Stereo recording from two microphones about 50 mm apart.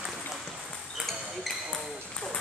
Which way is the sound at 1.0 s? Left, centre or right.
Centre.